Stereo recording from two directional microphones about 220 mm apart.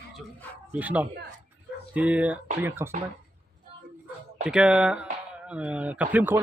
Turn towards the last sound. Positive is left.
turn(degrees=-10)  # may be behind; listen again after turning